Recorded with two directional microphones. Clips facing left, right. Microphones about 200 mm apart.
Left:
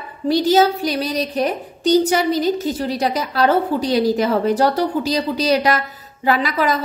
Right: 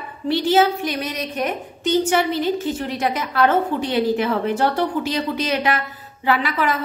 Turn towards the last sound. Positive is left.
turn(degrees=40)  # may be behind; listen again after turning